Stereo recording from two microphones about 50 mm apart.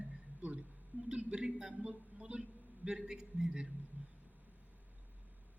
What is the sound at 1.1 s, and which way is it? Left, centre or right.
Speech, centre.